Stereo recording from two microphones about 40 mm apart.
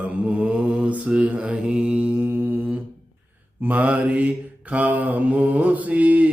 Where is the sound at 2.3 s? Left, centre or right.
Right.